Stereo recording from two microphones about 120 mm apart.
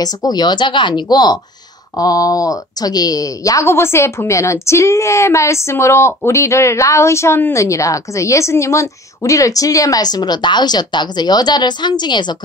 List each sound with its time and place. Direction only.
0.0 s a woman's voice: 35° left (ahead or behind)